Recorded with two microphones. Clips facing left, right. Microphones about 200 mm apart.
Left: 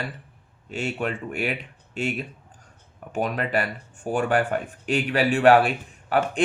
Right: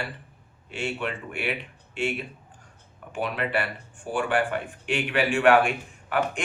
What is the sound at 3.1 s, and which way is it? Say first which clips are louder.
Speech: left 3 dB; 40° left (ahead or behind).